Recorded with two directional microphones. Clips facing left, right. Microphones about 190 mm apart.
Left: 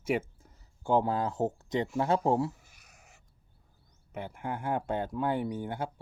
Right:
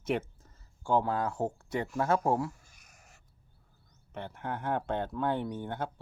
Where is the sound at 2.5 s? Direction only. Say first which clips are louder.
Left 1 dB; 5° left (ahead or behind).